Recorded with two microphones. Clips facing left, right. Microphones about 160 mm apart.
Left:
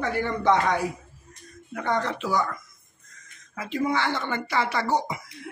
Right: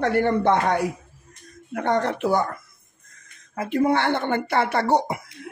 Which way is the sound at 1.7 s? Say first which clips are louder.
Right 4 dB; 60° right (ahead or behind).